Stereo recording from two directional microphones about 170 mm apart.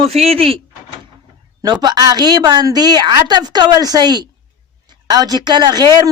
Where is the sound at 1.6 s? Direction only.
25° right (ahead or behind).